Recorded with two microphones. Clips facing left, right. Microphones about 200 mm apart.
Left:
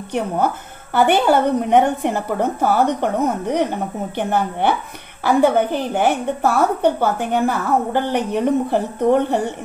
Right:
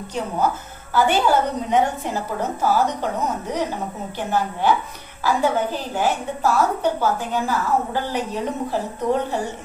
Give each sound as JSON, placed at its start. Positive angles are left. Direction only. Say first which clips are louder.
{"t": 0.9, "sound": "a woman's voice", "louder": "left 3 dB", "side_deg": 60}